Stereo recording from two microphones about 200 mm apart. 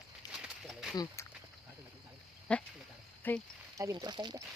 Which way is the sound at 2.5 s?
5° left (ahead or behind).